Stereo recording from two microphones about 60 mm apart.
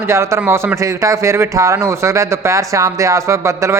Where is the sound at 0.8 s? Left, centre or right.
Right.